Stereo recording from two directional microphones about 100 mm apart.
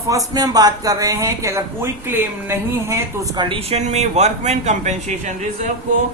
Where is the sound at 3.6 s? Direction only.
90° right.